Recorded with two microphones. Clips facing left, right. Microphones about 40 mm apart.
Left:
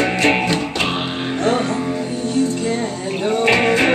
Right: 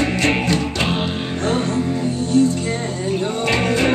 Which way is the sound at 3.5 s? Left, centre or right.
Left.